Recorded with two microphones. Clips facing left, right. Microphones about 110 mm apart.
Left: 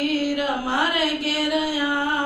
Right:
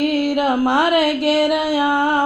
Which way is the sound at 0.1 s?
55° right (ahead or behind).